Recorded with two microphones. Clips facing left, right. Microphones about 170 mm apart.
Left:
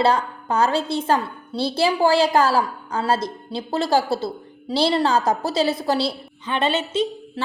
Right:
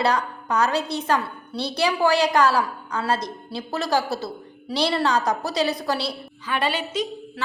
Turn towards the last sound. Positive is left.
turn(degrees=25)  # may be behind; listen again after turning